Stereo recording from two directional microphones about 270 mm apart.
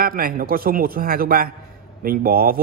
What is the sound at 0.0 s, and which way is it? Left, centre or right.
Speech, right.